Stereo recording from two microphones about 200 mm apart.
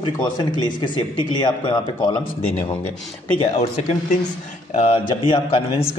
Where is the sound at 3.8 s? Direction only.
35° left (ahead or behind).